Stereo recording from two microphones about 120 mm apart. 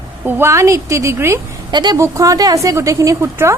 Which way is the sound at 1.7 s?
40° right (ahead or behind).